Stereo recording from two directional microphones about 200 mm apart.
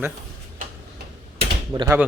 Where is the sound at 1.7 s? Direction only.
25° right (ahead or behind).